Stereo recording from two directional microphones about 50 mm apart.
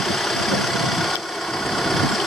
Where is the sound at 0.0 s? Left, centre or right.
Centre.